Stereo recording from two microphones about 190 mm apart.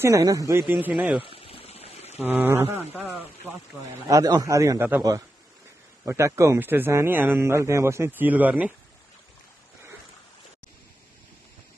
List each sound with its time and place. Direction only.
0.0 s a man's voice: 15° right (ahead or behind)
1.2 s a sound: 30° left (ahead or behind)
2.1 s a man's voice: 10° right (ahead or behind)